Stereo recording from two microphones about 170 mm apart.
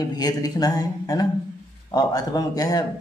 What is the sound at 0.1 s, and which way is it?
Speech, 20° left (ahead or behind).